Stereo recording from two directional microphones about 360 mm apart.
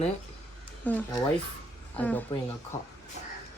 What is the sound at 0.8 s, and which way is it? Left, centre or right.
Speech, centre.